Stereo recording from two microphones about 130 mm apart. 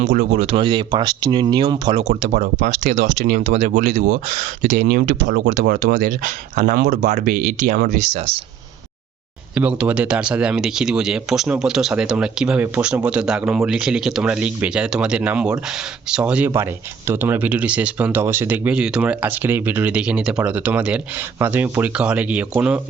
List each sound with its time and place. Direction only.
0.0 s speech: 55° right (ahead or behind); by 2.0 s 40° right (ahead or behind)
2.2 s speech: 75° right (ahead or behind); by 3.7 s 55° right (ahead or behind)
3.7 s speech: 65° right (ahead or behind)
9.6 s speech: 10° right (ahead or behind)